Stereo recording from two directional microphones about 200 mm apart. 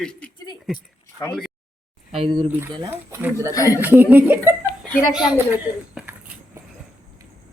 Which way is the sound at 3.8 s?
10° right (ahead or behind).